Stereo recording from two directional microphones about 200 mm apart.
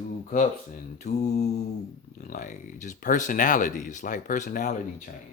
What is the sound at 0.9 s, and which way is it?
Speech, 35° left (ahead or behind).